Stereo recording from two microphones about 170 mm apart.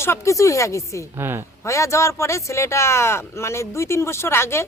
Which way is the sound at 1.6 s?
15° left (ahead or behind).